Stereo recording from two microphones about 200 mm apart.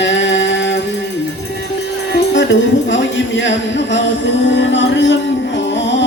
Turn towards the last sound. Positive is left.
turn(degrees=65)  # may be behind; listen again after turning